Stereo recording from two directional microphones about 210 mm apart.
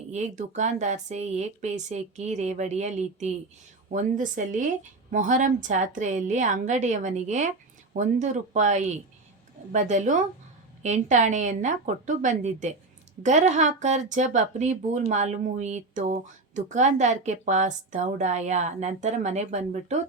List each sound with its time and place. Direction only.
0.1 s speech: 35° right (ahead or behind)